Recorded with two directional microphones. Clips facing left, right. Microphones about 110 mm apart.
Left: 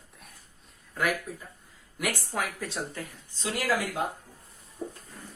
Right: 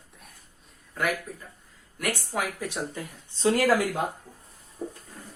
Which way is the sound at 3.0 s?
20° right (ahead or behind).